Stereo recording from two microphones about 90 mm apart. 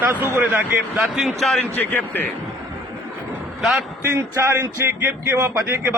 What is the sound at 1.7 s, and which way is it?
Speech, 20° left (ahead or behind).